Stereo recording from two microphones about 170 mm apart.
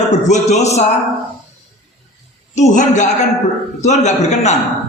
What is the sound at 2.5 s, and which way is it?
A man's voice, 45° left (ahead or behind).